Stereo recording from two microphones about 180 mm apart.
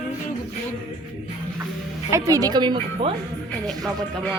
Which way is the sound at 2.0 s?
15° right (ahead or behind).